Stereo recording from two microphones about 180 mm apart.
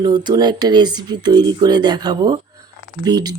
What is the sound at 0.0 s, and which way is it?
Speech, 25° right (ahead or behind).